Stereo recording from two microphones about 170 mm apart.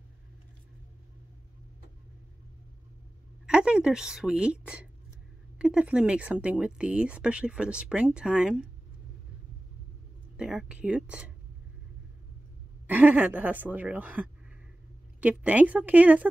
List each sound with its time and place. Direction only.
3.4 s a woman's voice: 5° right (ahead or behind)
10.3 s a woman's voice: 5° right (ahead or behind)
12.8 s speech: 10° right (ahead or behind)